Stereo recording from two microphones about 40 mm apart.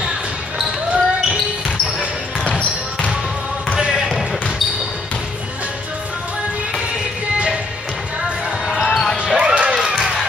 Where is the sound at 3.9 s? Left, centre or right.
Centre.